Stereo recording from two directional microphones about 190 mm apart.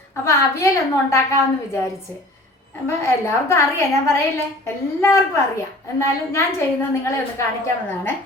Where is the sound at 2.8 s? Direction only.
15° left (ahead or behind).